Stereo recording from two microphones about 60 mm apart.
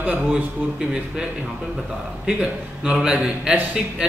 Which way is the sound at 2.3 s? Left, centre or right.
Centre.